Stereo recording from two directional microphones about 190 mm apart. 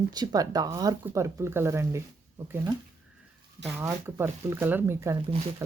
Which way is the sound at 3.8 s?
10° right (ahead or behind).